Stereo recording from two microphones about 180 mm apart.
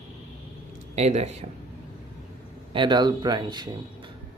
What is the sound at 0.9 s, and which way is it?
Speech, 35° right (ahead or behind).